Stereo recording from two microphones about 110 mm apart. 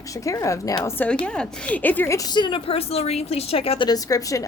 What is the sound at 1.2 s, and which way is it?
Speech, 10° left (ahead or behind).